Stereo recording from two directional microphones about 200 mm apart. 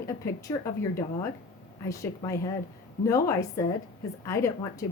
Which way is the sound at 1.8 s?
15° left (ahead or behind).